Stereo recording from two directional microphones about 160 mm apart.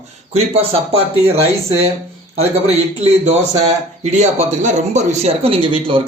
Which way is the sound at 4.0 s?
45° right (ahead or behind).